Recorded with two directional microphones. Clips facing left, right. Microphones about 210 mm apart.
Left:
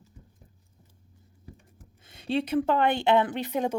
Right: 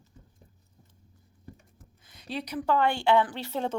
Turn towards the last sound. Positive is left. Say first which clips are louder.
# left 3 dB
turn(degrees=15)  # may be behind; listen again after turning